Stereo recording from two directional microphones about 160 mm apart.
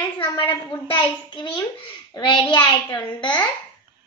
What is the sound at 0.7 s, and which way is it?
A child's voice, 30° left (ahead or behind).